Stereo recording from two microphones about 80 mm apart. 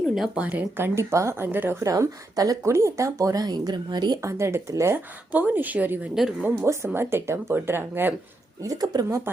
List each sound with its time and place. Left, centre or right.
0.3 s speech: centre
0.8 s speech: right
1.5 s speech: right
1.8 s speech: right
4.2 s speech: right
5.3 s speech: right
8.6 s speech: right
9.0 s speech: right